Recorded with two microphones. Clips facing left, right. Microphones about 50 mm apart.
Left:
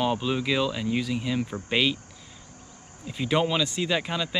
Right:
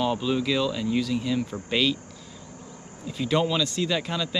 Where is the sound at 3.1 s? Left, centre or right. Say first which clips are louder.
Even; centre.